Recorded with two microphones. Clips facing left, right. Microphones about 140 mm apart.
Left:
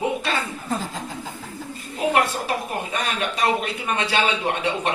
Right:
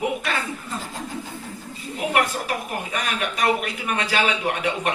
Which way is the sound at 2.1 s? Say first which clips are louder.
Even; 30° left (ahead or behind).